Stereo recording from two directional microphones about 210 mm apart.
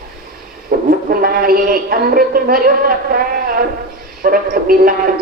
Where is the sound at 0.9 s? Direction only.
45° right (ahead or behind).